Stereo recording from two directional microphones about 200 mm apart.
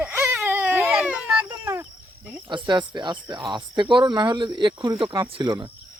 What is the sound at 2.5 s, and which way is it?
Speech, 20° right (ahead or behind).